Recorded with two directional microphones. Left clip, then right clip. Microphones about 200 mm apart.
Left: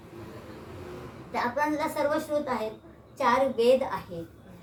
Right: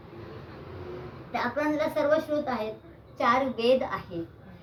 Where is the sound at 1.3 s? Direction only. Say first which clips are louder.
Left 1 dB; 5° left (ahead or behind).